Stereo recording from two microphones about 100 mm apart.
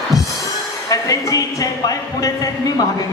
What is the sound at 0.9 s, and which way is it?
Speech, 35° left (ahead or behind).